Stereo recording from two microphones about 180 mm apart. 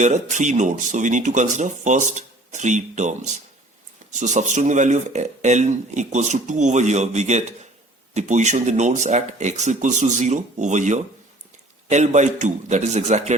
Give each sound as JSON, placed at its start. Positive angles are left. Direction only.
{"t": 0.0, "sound": "speech", "side_deg": -40}